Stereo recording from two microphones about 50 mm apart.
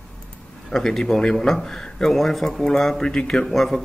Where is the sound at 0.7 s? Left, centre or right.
Centre.